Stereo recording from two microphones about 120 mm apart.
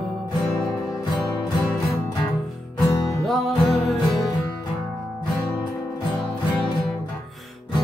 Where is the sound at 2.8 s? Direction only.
25° left (ahead or behind).